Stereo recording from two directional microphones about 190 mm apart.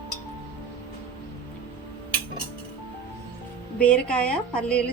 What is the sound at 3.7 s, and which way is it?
A woman's voice, 5° left (ahead or behind).